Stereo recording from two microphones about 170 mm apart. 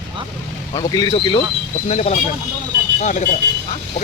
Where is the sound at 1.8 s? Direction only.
40° left (ahead or behind).